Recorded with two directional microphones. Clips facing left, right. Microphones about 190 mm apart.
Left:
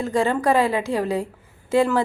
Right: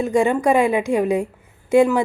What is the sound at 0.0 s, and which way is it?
A woman's voice, 15° right (ahead or behind).